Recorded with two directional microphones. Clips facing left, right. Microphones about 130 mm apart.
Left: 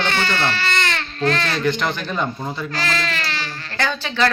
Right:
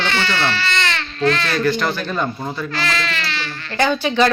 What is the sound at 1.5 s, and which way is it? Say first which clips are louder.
Speech: right 2 dB; 20° left (ahead or behind).